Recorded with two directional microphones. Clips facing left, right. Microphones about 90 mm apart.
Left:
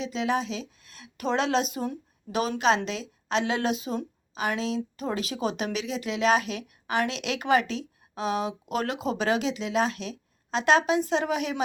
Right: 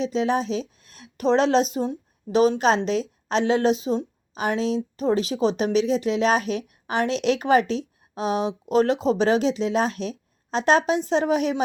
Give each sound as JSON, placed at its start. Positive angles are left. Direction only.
{"t": 0.0, "sound": "a woman's voice", "side_deg": -35}